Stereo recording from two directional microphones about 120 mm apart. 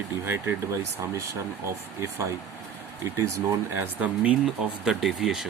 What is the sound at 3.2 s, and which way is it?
Speech, 20° right (ahead or behind).